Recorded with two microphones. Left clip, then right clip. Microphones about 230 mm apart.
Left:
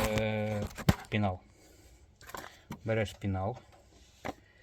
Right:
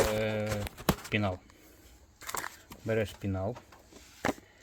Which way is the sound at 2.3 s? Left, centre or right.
Centre.